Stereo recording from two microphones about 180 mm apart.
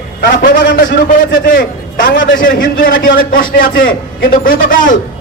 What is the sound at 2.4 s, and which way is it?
A man's voice, 50° left (ahead or behind).